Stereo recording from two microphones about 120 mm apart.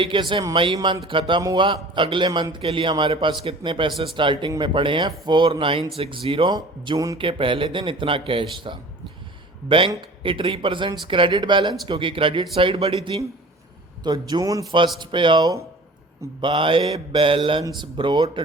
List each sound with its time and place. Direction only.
0.0 s speech: 45° right (ahead or behind)
7.2 s speech: 45° right (ahead or behind)
14.0 s speech: 35° right (ahead or behind)
14.9 s speech: 40° right (ahead or behind)
16.4 s speech: 45° right (ahead or behind)